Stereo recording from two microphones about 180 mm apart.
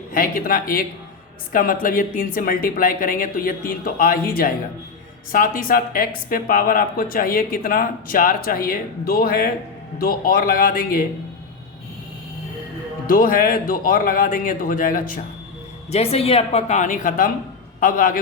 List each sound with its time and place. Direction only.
0.1 s speech: 50° left (ahead or behind)
13.1 s speech: 50° left (ahead or behind)
15.9 s a woman's voice: 35° left (ahead or behind); by 18.2 s 50° left (ahead or behind)